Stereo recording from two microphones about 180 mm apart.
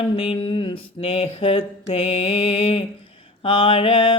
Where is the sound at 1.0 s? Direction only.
30° left (ahead or behind).